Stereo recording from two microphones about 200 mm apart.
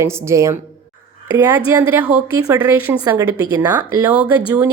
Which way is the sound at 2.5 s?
10° right (ahead or behind).